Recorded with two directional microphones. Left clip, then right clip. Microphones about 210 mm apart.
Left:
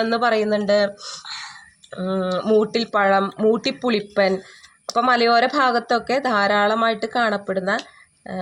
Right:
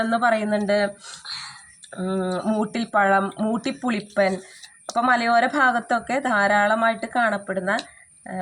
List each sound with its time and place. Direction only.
0.0 s a woman's voice: 50° left (ahead or behind)
2.0 s a woman's voice: 50° left (ahead or behind)